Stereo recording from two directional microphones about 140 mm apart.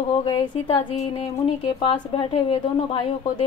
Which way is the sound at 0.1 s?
35° left (ahead or behind).